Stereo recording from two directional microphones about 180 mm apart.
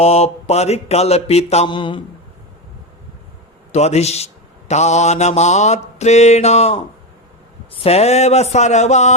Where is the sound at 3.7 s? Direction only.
35° left (ahead or behind).